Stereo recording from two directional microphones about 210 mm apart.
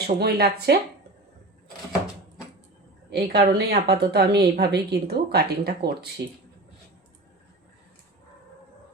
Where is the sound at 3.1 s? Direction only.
50° right (ahead or behind).